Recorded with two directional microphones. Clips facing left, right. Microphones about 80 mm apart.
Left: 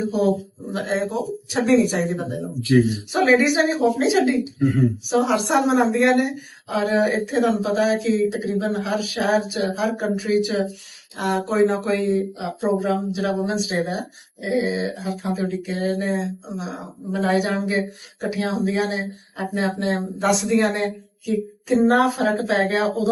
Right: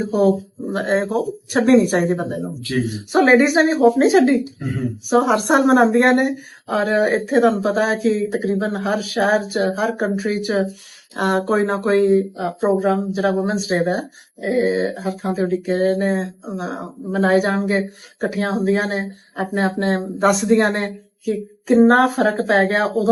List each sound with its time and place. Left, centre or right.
0.0 s speech: right